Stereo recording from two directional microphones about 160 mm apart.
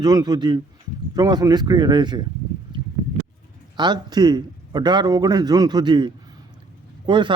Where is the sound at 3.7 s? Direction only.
25° right (ahead or behind).